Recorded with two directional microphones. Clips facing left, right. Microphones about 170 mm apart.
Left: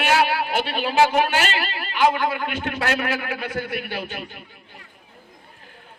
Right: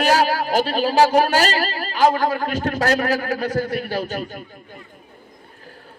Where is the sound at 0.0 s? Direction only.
40° right (ahead or behind).